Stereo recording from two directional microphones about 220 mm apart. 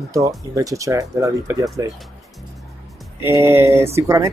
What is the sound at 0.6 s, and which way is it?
Speech, 15° right (ahead or behind).